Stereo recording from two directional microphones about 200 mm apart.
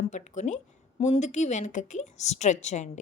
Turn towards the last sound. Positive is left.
turn(degrees=35)  # may be behind; listen again after turning